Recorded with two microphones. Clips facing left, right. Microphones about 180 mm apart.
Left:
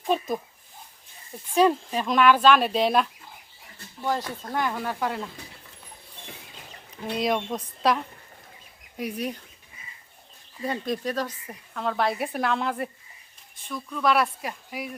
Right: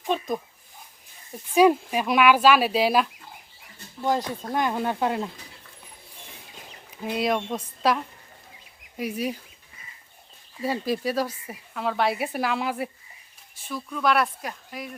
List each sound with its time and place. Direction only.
1.5 s speech: 10° right (ahead or behind)
4.0 s speech: 15° right (ahead or behind)
7.0 s speech: 5° right (ahead or behind)
10.6 s speech: 5° right (ahead or behind)